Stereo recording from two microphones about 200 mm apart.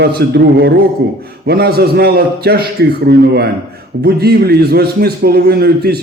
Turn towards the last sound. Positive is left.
turn(degrees=-50)  # may be behind; listen again after turning